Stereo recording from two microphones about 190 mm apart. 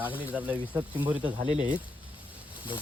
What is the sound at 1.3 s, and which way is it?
Speech, 40° right (ahead or behind).